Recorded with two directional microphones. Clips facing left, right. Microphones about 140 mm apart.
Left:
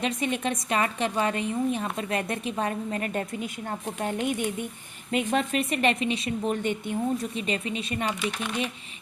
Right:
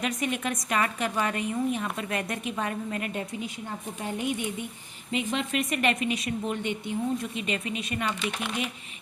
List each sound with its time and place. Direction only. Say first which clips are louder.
0.0 s a woman's voice: left 2 dB; 30° left (ahead or behind)
4.0 s a woman's voice: left 3 dB; 50° left (ahead or behind); by 6.5 s 30° left (ahead or behind)
6.5 s a woman's voice: left 3 dB; 45° left (ahead or behind); by 8.1 s 30° left (ahead or behind)